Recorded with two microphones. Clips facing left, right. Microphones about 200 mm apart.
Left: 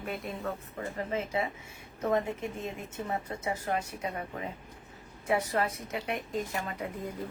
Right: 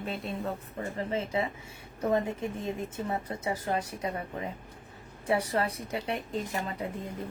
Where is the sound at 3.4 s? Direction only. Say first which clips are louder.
Right 1 dB; 30° right (ahead or behind).